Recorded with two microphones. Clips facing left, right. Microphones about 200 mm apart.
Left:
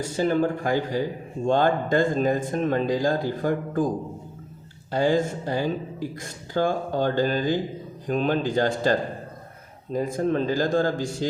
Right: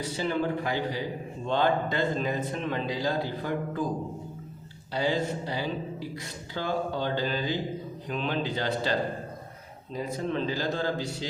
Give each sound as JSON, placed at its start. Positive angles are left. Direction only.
{"t": 0.0, "sound": "speech", "side_deg": 45}
{"t": 4.9, "sound": "speech", "side_deg": 50}